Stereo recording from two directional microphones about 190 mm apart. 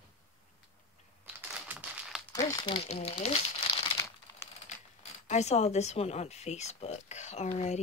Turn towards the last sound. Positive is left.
turn(degrees=35)  # may be behind; listen again after turning